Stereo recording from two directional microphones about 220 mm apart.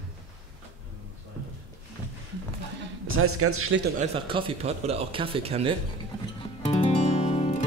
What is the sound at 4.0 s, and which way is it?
Speech, 25° right (ahead or behind).